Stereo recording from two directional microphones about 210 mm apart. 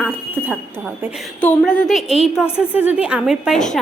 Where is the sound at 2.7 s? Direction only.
5° right (ahead or behind).